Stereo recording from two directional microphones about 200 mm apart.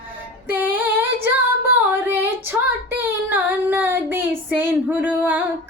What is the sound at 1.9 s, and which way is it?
Female singing, 10° right (ahead or behind).